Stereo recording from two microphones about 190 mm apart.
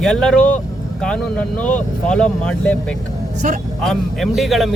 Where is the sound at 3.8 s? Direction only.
Centre (ahead or behind).